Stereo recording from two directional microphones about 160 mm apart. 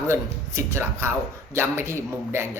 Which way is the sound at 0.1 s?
15° right (ahead or behind).